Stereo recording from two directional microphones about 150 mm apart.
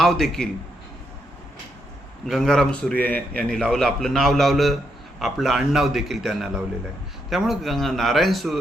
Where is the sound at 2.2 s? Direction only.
Centre (ahead or behind).